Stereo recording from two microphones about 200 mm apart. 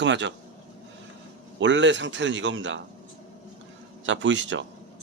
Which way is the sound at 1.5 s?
65° right (ahead or behind).